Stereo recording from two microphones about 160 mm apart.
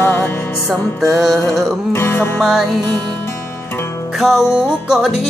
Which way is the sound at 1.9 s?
15° left (ahead or behind).